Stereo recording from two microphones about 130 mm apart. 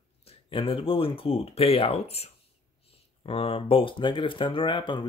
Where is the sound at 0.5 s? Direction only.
45° left (ahead or behind).